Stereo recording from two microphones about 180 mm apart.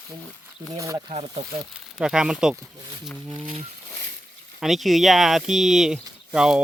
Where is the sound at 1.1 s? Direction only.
40° right (ahead or behind).